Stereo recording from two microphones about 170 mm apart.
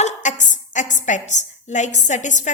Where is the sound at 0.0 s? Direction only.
45° left (ahead or behind).